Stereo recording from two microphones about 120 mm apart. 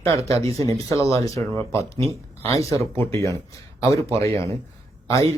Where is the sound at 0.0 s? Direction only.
25° left (ahead or behind).